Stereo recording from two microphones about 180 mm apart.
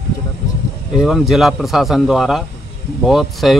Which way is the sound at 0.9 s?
Centre (ahead or behind).